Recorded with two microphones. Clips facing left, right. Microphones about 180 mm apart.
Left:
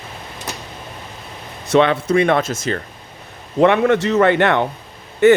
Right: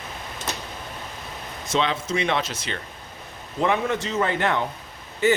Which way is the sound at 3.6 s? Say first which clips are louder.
Left 9 dB; 70° left (ahead or behind).